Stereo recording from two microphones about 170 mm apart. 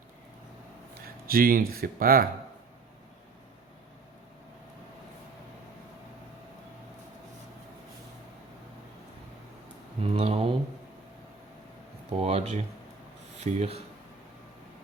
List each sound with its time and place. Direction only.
1.3 s speech: 60° right (ahead or behind)
10.0 s a sound: 35° right (ahead or behind)
12.1 s speech: 40° right (ahead or behind)